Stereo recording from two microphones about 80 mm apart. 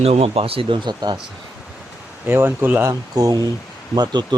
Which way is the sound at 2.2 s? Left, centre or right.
Right.